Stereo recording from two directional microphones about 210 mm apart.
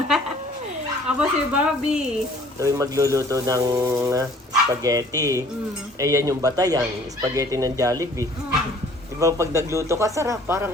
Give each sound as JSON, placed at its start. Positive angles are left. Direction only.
{"t": 1.0, "sound": "speech", "side_deg": -5}
{"t": 2.6, "sound": "speech", "side_deg": -15}